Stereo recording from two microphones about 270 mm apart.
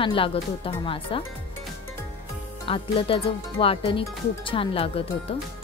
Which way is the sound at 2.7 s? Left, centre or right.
Centre.